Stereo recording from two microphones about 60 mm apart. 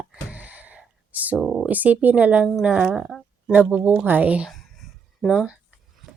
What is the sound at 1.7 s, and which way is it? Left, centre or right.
A woman's voice, right.